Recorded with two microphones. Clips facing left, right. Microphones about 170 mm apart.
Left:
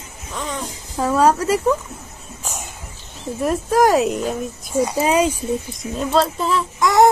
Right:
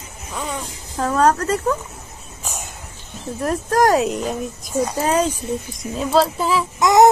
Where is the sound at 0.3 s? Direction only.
5° right (ahead or behind).